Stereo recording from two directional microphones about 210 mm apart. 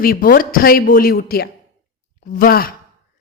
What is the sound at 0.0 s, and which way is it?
A woman's voice, 45° left (ahead or behind).